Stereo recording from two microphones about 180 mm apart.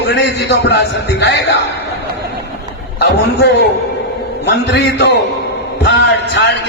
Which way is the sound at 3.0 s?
65° left (ahead or behind).